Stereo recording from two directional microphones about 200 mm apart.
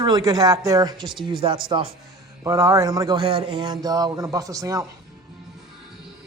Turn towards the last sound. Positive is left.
turn(degrees=-15)  # may be behind; listen again after turning